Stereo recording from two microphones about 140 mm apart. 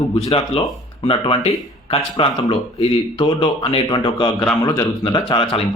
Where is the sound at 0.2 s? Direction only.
45° left (ahead or behind).